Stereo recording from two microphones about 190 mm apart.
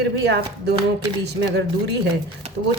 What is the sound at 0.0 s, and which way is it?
Speech, 60° right (ahead or behind).